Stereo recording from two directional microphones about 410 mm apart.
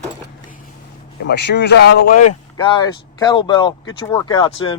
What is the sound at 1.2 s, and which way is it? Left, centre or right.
Speech, left.